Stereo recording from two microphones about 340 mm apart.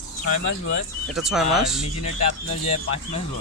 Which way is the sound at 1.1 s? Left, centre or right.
Centre.